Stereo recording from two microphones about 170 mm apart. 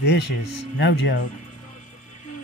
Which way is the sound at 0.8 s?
90° left.